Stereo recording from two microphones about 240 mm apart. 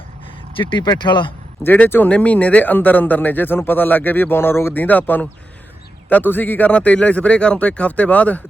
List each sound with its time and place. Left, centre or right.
0.5 s speech: centre
1.7 s a man's voice: centre